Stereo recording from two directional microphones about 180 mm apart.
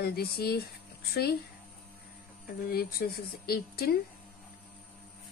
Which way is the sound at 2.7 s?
60° left (ahead or behind).